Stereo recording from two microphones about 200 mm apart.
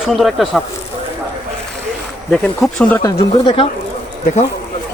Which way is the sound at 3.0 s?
25° left (ahead or behind).